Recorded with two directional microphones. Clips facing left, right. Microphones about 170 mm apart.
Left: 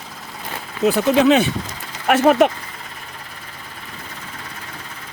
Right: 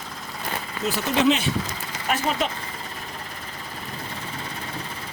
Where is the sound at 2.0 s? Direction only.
60° left (ahead or behind).